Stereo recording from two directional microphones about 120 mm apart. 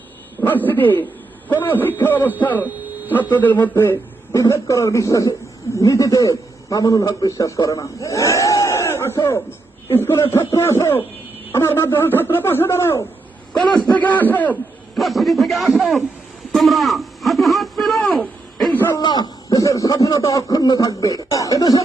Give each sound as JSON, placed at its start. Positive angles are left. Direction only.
{"t": 0.4, "sound": "a man's voice", "side_deg": 15}
{"t": 14.9, "sound": "a man's voice", "side_deg": 0}
{"t": 16.5, "sound": "radio", "side_deg": 0}
{"t": 18.9, "sound": "speech", "side_deg": 35}